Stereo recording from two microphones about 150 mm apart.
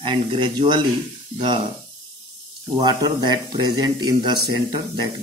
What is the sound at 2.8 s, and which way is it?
Speech, 30° right (ahead or behind).